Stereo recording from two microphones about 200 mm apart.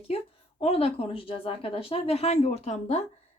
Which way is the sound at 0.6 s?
30° left (ahead or behind).